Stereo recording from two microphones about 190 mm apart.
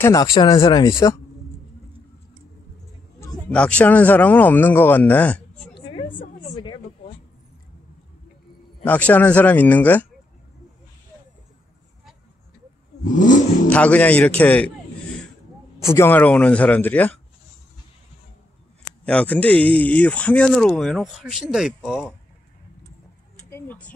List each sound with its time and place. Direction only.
0.0 s speech: 20° left (ahead or behind)
3.2 s speech: 10° left (ahead or behind)
5.8 s a sound: 25° left (ahead or behind)
8.8 s speech: 10° left (ahead or behind)
13.1 s vehicle: 45° left (ahead or behind)
13.7 s speech: 5° left (ahead or behind)
15.9 s speech: 10° left (ahead or behind)
19.0 s speech: 5° left (ahead or behind)
23.5 s a sound: 10° left (ahead or behind)